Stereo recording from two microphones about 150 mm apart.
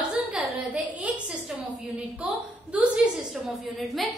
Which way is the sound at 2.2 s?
10° right (ahead or behind).